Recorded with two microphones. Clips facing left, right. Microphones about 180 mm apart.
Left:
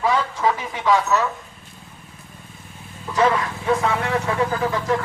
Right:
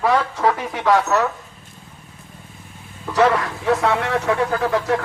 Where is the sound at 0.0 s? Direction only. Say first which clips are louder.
Right 2 dB; 65° right (ahead or behind).